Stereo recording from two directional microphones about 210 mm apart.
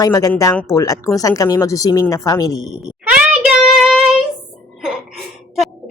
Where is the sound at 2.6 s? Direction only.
5° right (ahead or behind).